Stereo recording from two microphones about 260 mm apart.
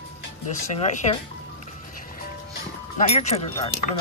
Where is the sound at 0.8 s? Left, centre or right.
Left.